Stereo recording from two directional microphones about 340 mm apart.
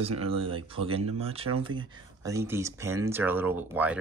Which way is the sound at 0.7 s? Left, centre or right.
Centre.